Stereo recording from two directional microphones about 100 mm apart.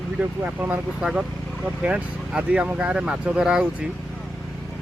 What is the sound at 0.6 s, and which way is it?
Speech, 20° right (ahead or behind).